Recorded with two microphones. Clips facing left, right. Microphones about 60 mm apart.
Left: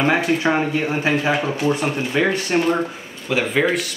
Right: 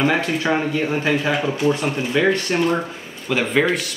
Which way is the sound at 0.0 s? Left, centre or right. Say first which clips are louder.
Left 2 dB; centre.